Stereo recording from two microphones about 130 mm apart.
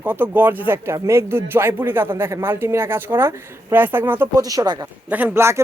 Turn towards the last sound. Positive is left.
turn(degrees=-20)  # may be behind; listen again after turning